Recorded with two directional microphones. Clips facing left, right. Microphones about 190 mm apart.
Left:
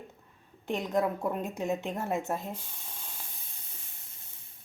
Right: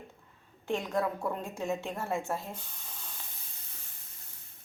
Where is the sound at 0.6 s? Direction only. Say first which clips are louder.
Left 2 dB; 20° left (ahead or behind).